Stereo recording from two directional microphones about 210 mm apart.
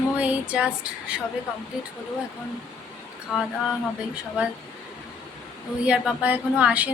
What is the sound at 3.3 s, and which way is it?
Speech, centre (ahead or behind).